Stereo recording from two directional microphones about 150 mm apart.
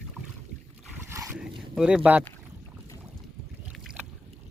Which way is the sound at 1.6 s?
5° right (ahead or behind).